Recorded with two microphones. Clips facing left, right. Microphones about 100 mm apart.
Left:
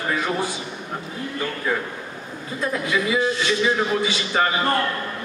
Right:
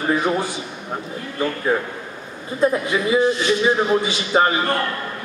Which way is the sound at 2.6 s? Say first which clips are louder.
Right 5 dB; 30° right (ahead or behind).